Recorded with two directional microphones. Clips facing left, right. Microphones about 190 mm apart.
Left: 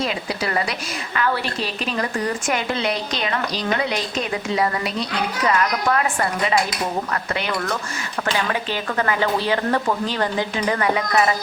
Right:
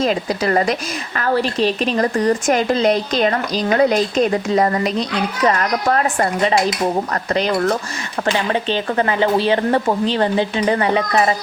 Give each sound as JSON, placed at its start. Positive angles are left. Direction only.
{"t": 0.0, "sound": "a woman's voice", "side_deg": -40}
{"t": 8.4, "sound": "speech", "side_deg": -25}